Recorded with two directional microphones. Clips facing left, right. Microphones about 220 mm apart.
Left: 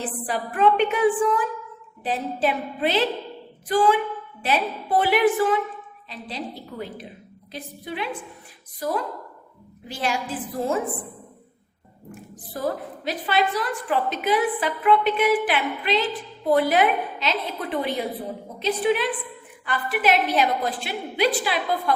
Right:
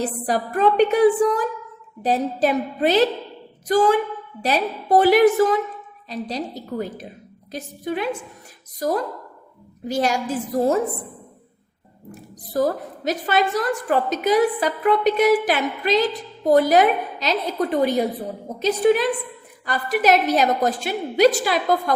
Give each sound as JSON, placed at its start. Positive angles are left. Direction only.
{"t": 0.3, "sound": "a woman's voice", "side_deg": -40}
{"t": 12.1, "sound": "a woman's voice", "side_deg": -40}